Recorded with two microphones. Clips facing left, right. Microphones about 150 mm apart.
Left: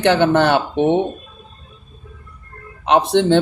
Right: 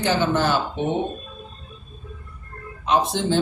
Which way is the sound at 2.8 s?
70° left (ahead or behind).